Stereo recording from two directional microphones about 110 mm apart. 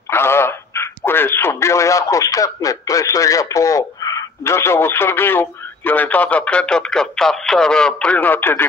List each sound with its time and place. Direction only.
0.1 s a man's voice: 20° left (ahead or behind)